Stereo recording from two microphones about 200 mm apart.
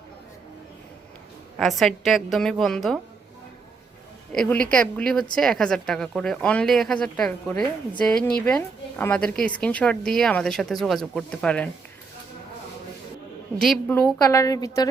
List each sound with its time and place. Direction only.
1.5 s a woman's voice: centre (ahead or behind)
4.3 s a woman's voice: 5° left (ahead or behind)
13.6 s a woman's voice: 5° left (ahead or behind)